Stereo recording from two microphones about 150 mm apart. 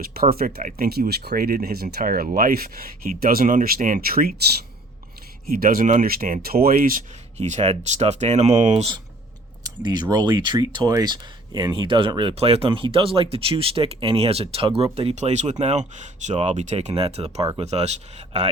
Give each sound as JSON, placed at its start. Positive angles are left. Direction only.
{"t": 0.0, "sound": "speech", "side_deg": -80}
{"t": 5.5, "sound": "speech", "side_deg": -70}
{"t": 7.3, "sound": "speech", "side_deg": -50}
{"t": 9.6, "sound": "speech", "side_deg": -25}